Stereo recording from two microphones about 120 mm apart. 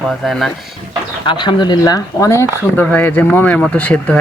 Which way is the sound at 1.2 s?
40° left (ahead or behind).